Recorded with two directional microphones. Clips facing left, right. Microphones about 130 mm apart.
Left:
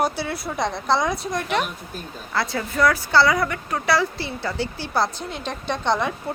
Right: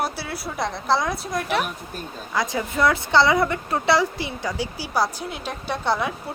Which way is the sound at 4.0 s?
15° right (ahead or behind).